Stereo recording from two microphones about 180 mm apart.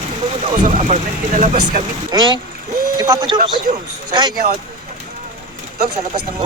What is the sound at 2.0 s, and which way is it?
Speech, 25° right (ahead or behind).